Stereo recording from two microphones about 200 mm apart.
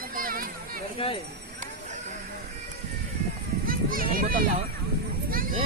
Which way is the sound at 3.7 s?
45° right (ahead or behind).